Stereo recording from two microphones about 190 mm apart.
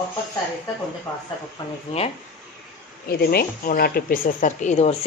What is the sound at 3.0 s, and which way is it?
Speech, 55° left (ahead or behind).